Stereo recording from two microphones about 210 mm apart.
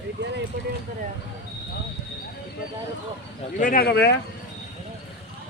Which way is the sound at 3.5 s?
40° left (ahead or behind).